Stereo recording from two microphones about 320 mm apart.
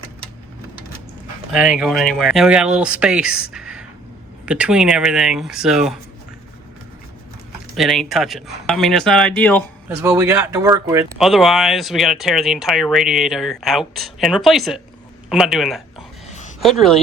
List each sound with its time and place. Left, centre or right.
1.5 s speech: centre
7.8 s speech: centre
9.9 s speech: centre
11.2 s speech: centre